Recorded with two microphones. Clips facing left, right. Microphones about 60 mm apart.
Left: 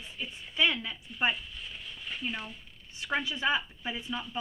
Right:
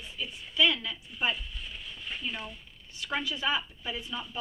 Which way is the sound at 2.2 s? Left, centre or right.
Left.